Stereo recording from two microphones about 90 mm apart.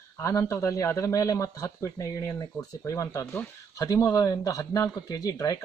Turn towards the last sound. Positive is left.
turn(degrees=40)  # may be behind; listen again after turning